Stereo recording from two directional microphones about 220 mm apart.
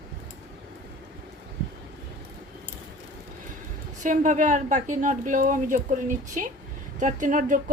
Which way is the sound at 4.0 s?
35° right (ahead or behind).